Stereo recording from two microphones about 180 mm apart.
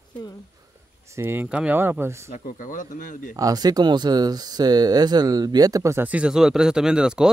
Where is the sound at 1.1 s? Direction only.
10° right (ahead or behind).